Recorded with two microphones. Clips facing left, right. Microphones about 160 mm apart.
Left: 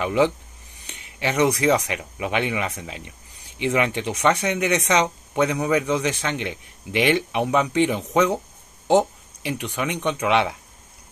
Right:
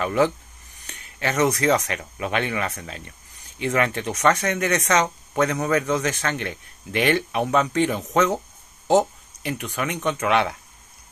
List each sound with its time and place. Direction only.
0.0 s speech: 15° left (ahead or behind)
9.5 s speech: 10° left (ahead or behind)